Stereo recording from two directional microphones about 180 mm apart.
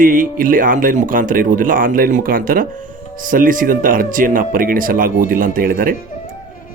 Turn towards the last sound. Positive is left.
turn(degrees=-50)  # may be behind; listen again after turning